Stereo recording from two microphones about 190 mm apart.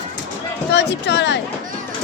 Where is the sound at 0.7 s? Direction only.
65° left (ahead or behind).